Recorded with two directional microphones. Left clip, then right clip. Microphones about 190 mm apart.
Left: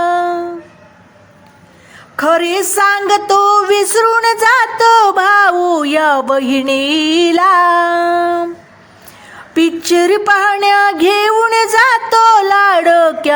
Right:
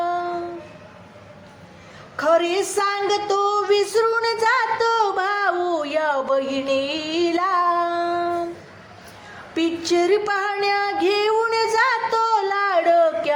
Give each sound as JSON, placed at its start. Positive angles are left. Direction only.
{"t": 0.0, "sound": "a sound", "side_deg": 50}
{"t": 2.1, "sound": "speech", "side_deg": 40}
{"t": 9.6, "sound": "music", "side_deg": 45}